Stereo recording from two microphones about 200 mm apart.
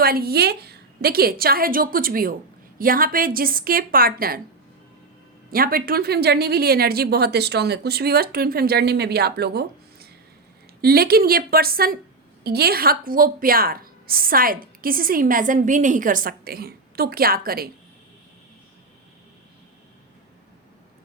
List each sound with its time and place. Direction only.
0.0 s a woman's voice: 50° right (ahead or behind)
5.5 s a woman's voice: 45° right (ahead or behind)